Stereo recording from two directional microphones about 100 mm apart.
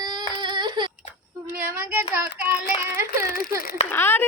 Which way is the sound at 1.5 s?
20° right (ahead or behind).